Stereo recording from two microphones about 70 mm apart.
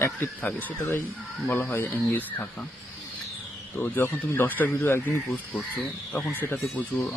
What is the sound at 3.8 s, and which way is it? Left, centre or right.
Speech, left.